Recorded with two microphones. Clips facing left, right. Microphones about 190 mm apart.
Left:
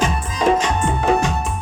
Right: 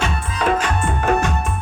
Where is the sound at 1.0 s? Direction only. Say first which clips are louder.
Left 1 dB; 15° left (ahead or behind).